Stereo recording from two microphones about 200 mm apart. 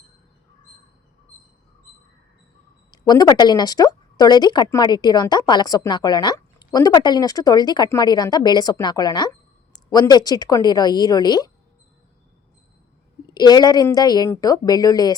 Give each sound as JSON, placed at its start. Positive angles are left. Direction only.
{"t": 2.9, "sound": "speech", "side_deg": 20}
{"t": 13.2, "sound": "speech", "side_deg": 20}